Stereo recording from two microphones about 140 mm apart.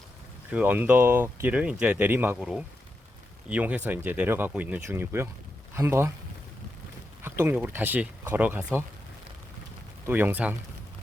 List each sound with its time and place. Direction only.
0.5 s speech: 10° right (ahead or behind)
3.5 s a man's voice: 10° right (ahead or behind)
7.2 s speech: 20° right (ahead or behind)
10.1 s speech: 15° right (ahead or behind)